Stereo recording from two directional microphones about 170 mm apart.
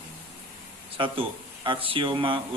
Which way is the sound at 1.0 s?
30° right (ahead or behind).